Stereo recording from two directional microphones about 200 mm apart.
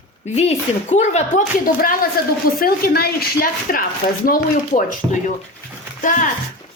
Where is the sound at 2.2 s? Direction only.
50° left (ahead or behind).